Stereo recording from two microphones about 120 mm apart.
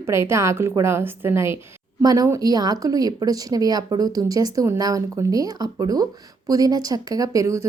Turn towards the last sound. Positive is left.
turn(degrees=-25)  # may be behind; listen again after turning